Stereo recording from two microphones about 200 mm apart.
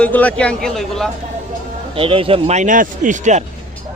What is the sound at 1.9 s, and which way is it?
A man's voice, 25° right (ahead or behind).